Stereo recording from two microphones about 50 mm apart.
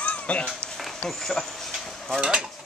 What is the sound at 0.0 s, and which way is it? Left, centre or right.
Cat, left.